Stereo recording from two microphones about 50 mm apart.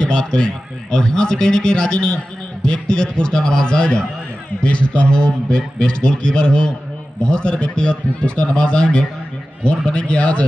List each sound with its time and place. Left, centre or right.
0.0 s speech: centre